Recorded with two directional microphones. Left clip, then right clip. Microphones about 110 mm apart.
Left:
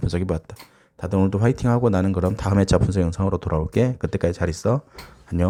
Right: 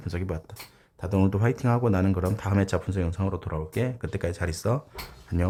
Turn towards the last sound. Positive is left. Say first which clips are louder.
# left 6 dB
turn(degrees=10)  # may be behind; listen again after turning